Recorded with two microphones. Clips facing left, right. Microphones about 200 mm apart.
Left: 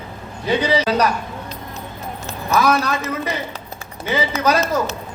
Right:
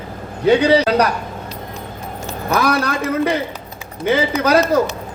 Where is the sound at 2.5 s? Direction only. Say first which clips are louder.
Even; 60° right (ahead or behind).